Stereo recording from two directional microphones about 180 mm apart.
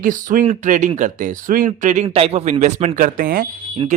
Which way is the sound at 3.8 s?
30° right (ahead or behind).